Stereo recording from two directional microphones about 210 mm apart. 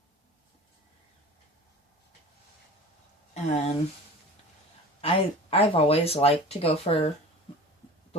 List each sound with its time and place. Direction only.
3.3 s speech: 30° left (ahead or behind)
4.9 s speech: 30° left (ahead or behind)